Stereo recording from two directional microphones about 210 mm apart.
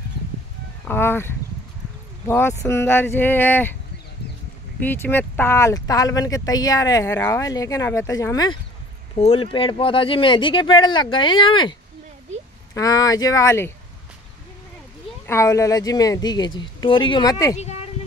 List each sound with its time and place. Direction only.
0.8 s speech: 10° left (ahead or behind)
4.7 s speech: 10° left (ahead or behind)
9.1 s speech: 25° left (ahead or behind)
12.7 s speech: 15° left (ahead or behind)
15.2 s speech: 15° left (ahead or behind)
17.6 s speech: 30° left (ahead or behind)